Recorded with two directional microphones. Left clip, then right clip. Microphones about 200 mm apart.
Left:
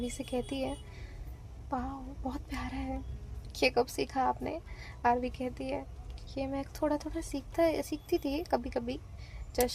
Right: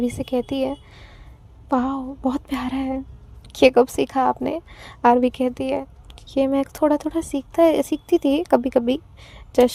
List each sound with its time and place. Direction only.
0.0 s speech: 40° right (ahead or behind)